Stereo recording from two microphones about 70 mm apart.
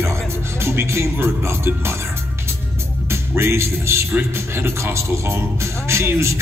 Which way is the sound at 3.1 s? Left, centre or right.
Right.